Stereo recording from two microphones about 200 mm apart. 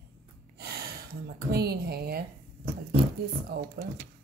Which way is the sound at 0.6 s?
55° right (ahead or behind).